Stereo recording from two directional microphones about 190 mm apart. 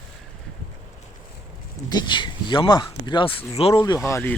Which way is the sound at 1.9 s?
25° left (ahead or behind).